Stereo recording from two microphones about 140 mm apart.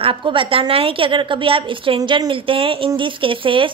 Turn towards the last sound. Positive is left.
turn(degrees=-40)  # may be behind; listen again after turning